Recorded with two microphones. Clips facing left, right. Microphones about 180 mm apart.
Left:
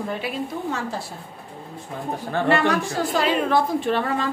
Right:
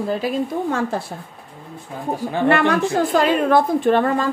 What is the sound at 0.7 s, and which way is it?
Speech, 55° right (ahead or behind).